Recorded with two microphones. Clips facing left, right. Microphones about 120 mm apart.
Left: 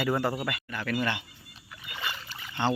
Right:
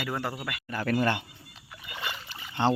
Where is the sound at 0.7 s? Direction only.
40° right (ahead or behind).